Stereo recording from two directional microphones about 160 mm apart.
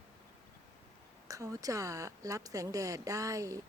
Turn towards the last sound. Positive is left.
turn(degrees=-20)  # may be behind; listen again after turning